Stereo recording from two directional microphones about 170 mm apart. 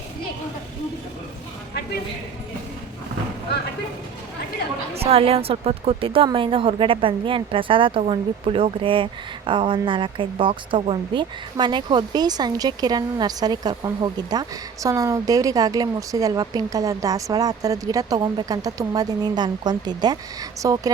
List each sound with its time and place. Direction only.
4.9 s speech: 35° right (ahead or behind); by 20.9 s 20° right (ahead or behind)